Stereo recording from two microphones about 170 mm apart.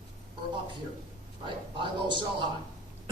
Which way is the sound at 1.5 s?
30° right (ahead or behind).